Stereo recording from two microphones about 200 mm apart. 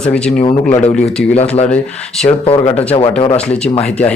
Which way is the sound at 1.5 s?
35° left (ahead or behind).